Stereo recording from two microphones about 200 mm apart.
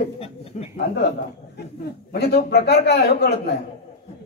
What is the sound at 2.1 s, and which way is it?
A man's voice, 55° left (ahead or behind).